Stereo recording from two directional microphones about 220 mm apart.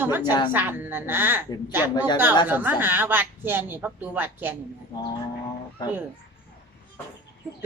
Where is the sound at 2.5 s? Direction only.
10° right (ahead or behind).